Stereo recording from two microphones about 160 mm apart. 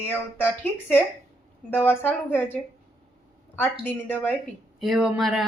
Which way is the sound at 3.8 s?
10° left (ahead or behind).